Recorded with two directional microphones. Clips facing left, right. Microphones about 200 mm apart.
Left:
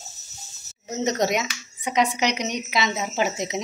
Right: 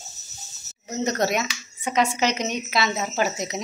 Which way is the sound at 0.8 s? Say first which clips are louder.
Left 1 dB; 20° left (ahead or behind).